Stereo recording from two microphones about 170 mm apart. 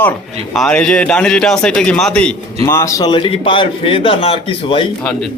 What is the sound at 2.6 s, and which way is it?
A man's voice, 15° left (ahead or behind).